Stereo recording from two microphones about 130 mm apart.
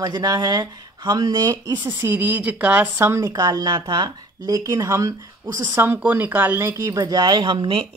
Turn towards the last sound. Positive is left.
turn(degrees=-40)  # may be behind; listen again after turning